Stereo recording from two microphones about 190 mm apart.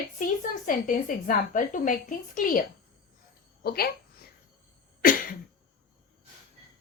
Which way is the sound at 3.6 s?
55° left (ahead or behind).